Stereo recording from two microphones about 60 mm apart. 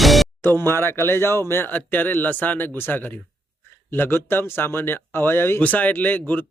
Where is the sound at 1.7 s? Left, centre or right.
Left.